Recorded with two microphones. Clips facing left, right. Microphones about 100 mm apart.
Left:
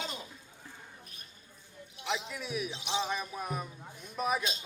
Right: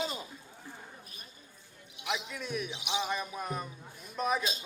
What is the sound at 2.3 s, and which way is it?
Speech, centre (ahead or behind).